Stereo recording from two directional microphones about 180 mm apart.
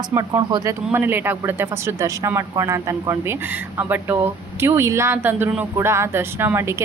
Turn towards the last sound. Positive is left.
turn(degrees=-15)  # may be behind; listen again after turning